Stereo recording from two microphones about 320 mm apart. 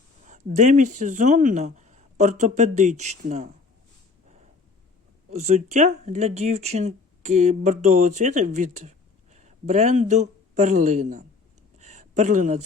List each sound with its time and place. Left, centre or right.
0.3 s speech: right
5.3 s speech: right
11.8 s a sound: right